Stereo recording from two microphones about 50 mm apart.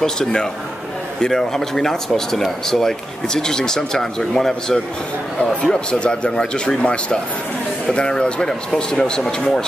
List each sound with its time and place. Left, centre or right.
0.0 s speech: centre